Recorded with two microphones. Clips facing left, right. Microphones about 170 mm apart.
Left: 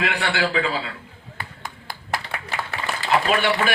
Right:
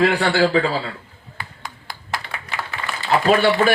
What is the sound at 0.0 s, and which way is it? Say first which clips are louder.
Speech: right 7 dB; 35° right (ahead or behind).